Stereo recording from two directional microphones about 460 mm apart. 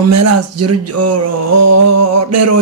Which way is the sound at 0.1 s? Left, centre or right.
Right.